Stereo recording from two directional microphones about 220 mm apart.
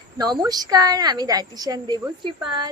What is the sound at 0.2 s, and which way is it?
A woman's voice, 20° right (ahead or behind).